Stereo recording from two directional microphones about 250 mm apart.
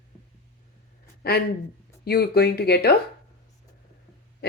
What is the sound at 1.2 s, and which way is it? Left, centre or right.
Speech, left.